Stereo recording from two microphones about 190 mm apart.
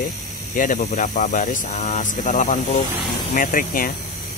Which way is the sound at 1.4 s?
35° left (ahead or behind).